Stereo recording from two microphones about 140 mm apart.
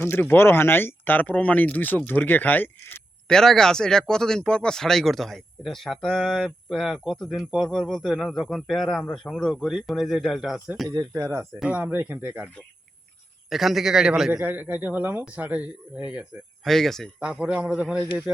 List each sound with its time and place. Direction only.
0.0 s speech: 15° left (ahead or behind)
10.8 s speech: 20° right (ahead or behind)
11.6 s speech: 10° right (ahead or behind)
13.5 s speech: centre (ahead or behind)
16.6 s speech: centre (ahead or behind)
17.2 s speech: 10° right (ahead or behind)